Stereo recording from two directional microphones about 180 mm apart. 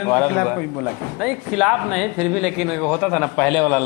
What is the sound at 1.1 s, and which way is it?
Speech, 5° right (ahead or behind).